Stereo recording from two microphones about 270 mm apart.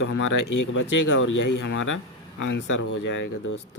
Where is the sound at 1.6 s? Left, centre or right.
Left.